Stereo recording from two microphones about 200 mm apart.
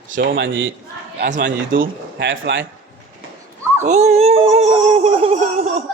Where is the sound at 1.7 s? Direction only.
45° right (ahead or behind).